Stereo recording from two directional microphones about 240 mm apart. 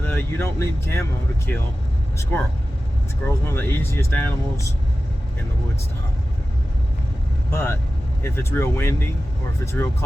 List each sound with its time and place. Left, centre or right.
0.0 s speech: centre
7.5 s speech: centre